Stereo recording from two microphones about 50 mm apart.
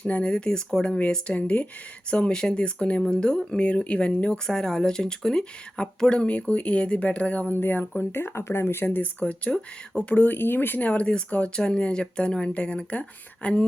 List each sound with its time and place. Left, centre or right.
0.0 s speech: left
1.3 s speech: left
7.6 s speech: left
9.2 s speech: left
10.2 s speech: left
10.8 s speech: left